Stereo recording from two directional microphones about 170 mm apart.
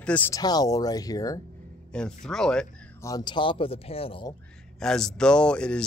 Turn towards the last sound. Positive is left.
turn(degrees=5)  # may be behind; listen again after turning